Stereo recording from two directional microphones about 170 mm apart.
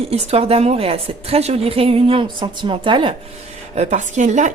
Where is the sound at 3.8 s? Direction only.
45° right (ahead or behind).